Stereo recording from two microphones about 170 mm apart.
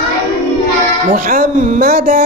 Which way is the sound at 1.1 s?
50° right (ahead or behind).